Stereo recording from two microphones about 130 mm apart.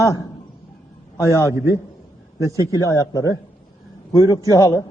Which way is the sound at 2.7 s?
25° left (ahead or behind).